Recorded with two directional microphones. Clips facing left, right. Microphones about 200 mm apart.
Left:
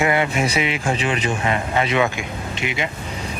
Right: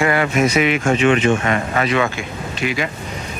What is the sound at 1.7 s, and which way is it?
Speech, 20° left (ahead or behind).